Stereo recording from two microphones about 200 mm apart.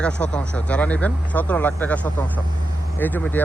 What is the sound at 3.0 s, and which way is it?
Speech, 10° left (ahead or behind).